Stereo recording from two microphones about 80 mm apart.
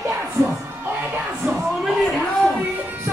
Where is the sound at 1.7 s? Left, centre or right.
Centre.